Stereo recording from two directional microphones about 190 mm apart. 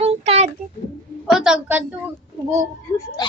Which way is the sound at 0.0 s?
30° right (ahead or behind).